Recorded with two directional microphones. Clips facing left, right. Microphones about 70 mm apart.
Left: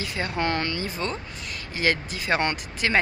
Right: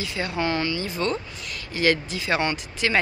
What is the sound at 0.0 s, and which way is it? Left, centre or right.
Speech, left.